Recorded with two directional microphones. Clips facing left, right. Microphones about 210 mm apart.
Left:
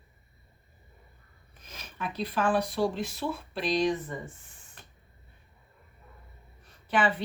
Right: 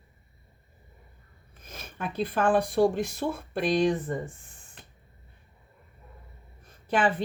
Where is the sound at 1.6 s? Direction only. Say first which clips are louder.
Right 2 dB; 50° right (ahead or behind).